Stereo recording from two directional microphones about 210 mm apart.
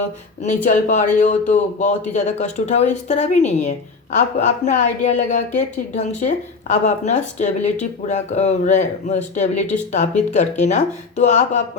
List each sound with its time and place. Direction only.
0.4 s speech: 35° left (ahead or behind)